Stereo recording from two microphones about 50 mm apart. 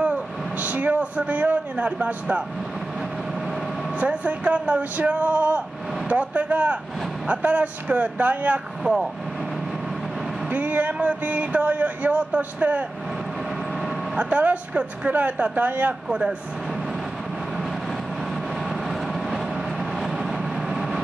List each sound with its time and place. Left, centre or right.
0.0 s speech: right
4.0 s speech: right
10.5 s speech: right
14.1 s speech: right
16.1 s speech: centre
18.9 s vehicle: centre